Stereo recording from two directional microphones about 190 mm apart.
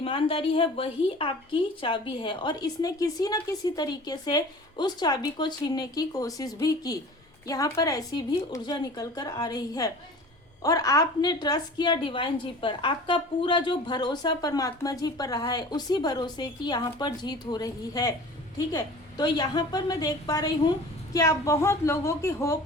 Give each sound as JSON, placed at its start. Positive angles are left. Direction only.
{"t": 0.0, "sound": "a woman's voice", "side_deg": 30}